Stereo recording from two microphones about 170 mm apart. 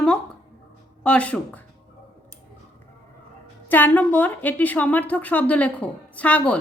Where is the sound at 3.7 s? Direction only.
10° left (ahead or behind).